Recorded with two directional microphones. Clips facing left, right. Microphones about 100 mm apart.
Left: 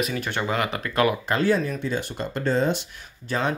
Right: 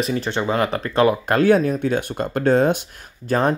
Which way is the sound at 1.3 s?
50° right (ahead or behind).